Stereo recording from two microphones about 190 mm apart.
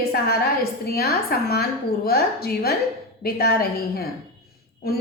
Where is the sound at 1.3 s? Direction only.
55° left (ahead or behind).